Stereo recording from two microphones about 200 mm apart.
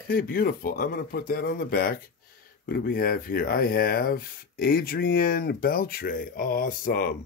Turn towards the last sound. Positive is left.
turn(degrees=45)  # may be behind; listen again after turning